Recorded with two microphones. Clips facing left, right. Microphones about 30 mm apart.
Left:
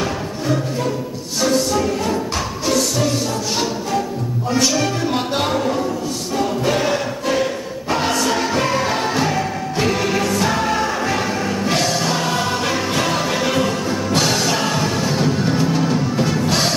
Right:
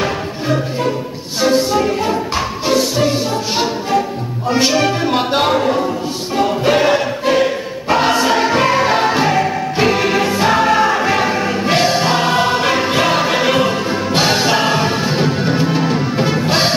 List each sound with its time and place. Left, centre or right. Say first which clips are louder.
0.0 s music: right 3 dB; right